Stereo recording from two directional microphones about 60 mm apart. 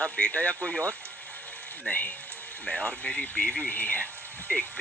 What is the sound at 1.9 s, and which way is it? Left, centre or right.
Speech, centre.